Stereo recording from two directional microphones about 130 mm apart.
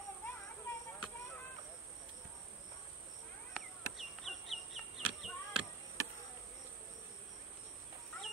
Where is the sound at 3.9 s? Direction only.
Centre (ahead or behind).